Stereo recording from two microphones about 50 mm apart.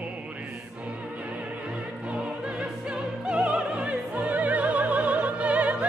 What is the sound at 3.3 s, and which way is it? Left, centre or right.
Music, centre.